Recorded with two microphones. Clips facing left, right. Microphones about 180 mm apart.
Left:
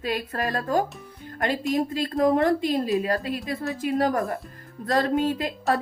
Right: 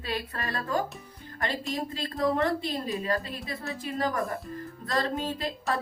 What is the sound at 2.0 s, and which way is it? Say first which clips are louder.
Speech: left 5 dB; 50° left (ahead or behind).